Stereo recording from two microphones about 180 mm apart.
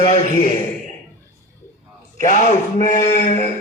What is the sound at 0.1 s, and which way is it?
Speech, 45° left (ahead or behind).